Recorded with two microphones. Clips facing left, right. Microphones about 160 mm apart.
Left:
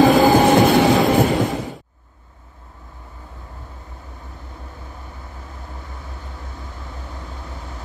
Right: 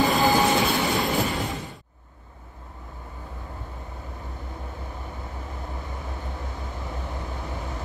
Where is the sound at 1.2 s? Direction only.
40° left (ahead or behind).